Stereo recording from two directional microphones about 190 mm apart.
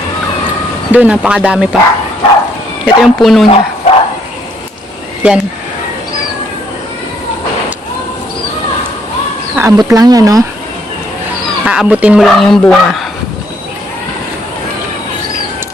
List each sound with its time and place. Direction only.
0.9 s speech: 5° right (ahead or behind)
2.8 s speech: centre (ahead or behind)
3.4 s bow-wow: 30° left (ahead or behind)
5.2 s speech: 5° right (ahead or behind)
9.6 s speech: 15° right (ahead or behind)
11.6 s speech: 5° right (ahead or behind)